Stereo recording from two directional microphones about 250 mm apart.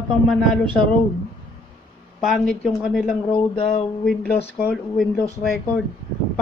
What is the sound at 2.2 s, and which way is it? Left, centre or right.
Speech, centre.